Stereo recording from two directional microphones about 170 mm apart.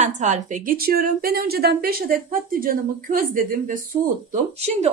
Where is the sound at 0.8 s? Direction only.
65° right (ahead or behind).